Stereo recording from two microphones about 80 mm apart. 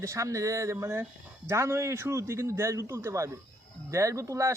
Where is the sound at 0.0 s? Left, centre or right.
Right.